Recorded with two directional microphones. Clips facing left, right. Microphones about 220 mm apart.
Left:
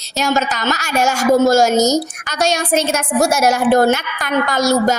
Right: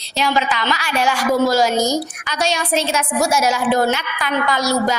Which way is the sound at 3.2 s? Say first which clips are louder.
Left 4 dB; 60° left (ahead or behind).